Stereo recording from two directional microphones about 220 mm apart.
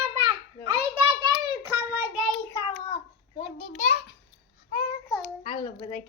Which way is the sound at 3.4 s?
30° left (ahead or behind).